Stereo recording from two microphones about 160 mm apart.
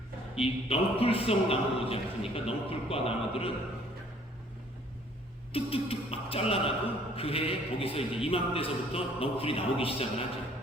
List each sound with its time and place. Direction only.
0.3 s a man's voice: 35° left (ahead or behind)
5.5 s a man's voice: 35° left (ahead or behind)